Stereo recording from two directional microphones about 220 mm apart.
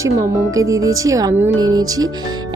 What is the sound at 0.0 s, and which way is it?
Speech, 15° right (ahead or behind).